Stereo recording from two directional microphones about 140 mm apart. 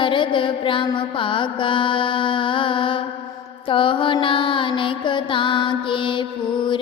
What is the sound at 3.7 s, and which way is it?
Mantra, 40° left (ahead or behind).